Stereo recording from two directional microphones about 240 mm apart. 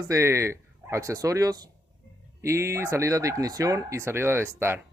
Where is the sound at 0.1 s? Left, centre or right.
Centre.